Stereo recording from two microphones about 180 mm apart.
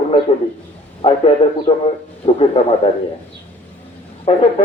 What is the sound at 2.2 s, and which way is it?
Speech, 35° left (ahead or behind).